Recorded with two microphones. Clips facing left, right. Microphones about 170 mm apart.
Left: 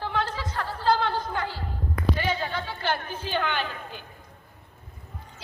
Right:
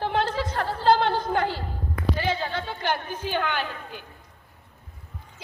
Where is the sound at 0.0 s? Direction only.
65° right (ahead or behind).